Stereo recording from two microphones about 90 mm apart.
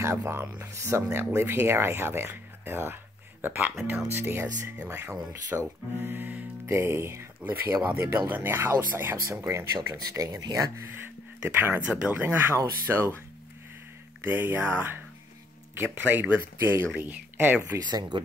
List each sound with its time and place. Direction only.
0.0 s speech: 30° right (ahead or behind)
5.5 s speech: 15° right (ahead or behind); by 9.7 s 30° right (ahead or behind)
9.8 s speech: 45° right (ahead or behind)
11.4 s speech: 25° right (ahead or behind)
14.2 s speech: 20° right (ahead or behind)